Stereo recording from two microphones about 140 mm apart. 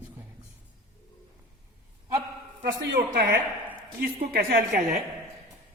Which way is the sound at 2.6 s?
90° right.